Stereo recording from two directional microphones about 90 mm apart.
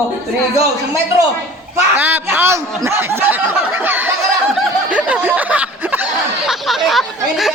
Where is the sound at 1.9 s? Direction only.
20° right (ahead or behind).